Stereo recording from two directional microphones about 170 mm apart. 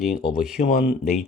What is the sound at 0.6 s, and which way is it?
Speech, 40° left (ahead or behind).